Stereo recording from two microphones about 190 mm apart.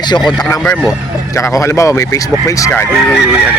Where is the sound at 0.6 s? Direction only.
5° left (ahead or behind).